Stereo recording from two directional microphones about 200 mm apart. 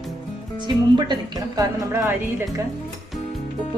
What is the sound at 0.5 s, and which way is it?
A woman's voice, 25° right (ahead or behind).